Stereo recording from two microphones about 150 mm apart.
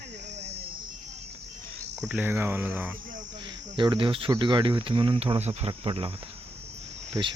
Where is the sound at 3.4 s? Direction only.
30° right (ahead or behind).